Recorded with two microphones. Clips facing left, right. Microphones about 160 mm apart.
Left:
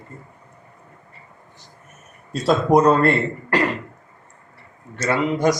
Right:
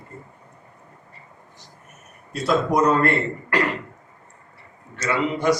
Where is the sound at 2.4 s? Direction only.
35° left (ahead or behind).